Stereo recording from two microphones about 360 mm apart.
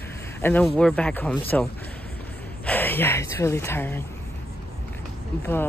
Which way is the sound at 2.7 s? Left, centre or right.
Centre.